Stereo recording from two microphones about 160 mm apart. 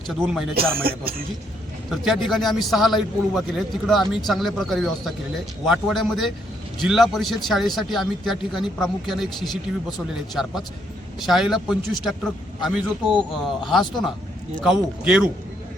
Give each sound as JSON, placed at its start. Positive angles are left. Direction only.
{"t": 0.1, "sound": "a man's voice", "side_deg": 0}
{"t": 0.5, "sound": "speech", "side_deg": -70}
{"t": 1.9, "sound": "a man's voice", "side_deg": 0}
{"t": 11.2, "sound": "a man's voice", "side_deg": 0}